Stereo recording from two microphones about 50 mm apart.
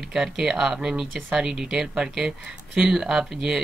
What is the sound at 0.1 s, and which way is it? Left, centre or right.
Speech, centre.